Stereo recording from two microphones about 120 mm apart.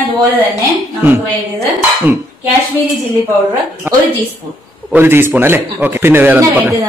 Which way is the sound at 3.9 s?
15° right (ahead or behind).